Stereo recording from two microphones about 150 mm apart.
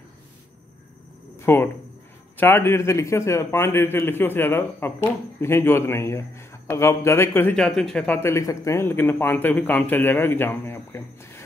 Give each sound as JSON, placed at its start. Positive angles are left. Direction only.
{"t": 1.4, "sound": "a man's voice", "side_deg": 15}
{"t": 7.5, "sound": "a man's voice", "side_deg": 5}
{"t": 8.2, "sound": "a man's voice", "side_deg": 20}